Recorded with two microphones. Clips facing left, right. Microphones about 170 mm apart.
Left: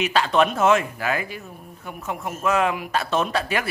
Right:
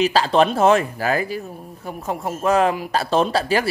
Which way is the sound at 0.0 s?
35° right (ahead or behind).